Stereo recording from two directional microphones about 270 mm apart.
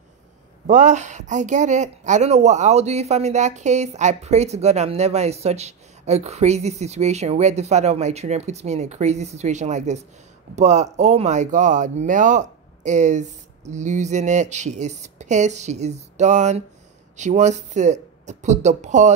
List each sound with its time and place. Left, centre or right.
0.7 s speech: right